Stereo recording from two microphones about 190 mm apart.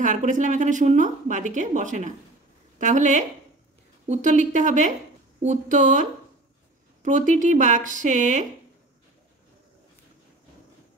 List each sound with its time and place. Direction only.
0.0 s a woman's voice: 40° right (ahead or behind)